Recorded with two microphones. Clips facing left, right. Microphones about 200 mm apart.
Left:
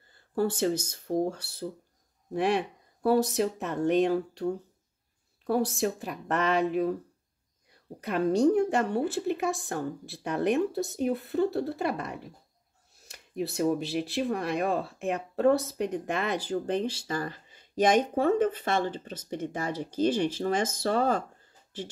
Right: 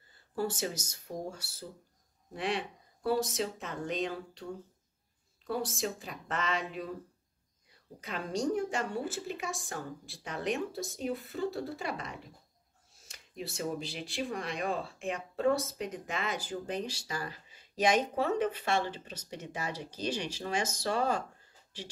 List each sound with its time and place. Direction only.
0.4 s a woman's voice: 60° left (ahead or behind)
5.5 s a woman's voice: 60° left (ahead or behind)
8.0 s a woman's voice: 60° left (ahead or behind)